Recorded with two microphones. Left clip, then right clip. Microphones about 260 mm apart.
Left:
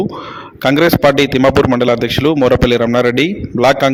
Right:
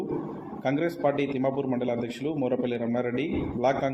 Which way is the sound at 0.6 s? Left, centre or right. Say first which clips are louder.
Left 16 dB; left.